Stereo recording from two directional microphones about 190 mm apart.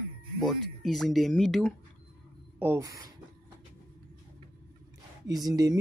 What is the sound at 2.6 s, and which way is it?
Speech, 15° right (ahead or behind).